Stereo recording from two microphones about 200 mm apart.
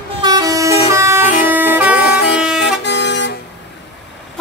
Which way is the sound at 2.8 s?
60° left (ahead or behind).